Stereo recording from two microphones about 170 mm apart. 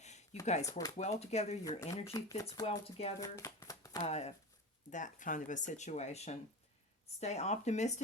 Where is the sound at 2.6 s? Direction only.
40° left (ahead or behind).